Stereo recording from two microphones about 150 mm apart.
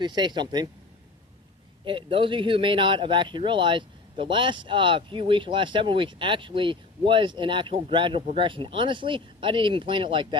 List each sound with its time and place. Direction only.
0.0 s speech: 30° right (ahead or behind)
1.8 s speech: 35° right (ahead or behind)